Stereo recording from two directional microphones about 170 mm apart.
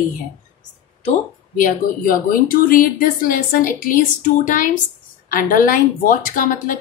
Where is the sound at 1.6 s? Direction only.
55° left (ahead or behind).